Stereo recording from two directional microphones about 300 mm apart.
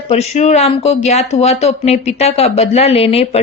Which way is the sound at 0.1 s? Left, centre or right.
Left.